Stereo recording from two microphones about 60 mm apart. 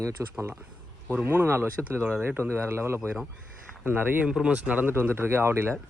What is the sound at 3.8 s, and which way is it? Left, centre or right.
Speech, right.